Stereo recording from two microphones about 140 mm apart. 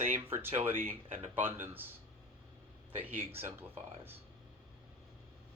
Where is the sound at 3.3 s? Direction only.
15° right (ahead or behind).